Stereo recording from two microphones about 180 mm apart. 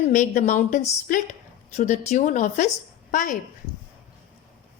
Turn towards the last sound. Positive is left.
turn(degrees=45)  # may be behind; listen again after turning